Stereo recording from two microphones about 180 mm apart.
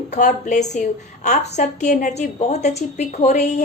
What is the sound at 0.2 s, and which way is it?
A woman's voice, 45° left (ahead or behind).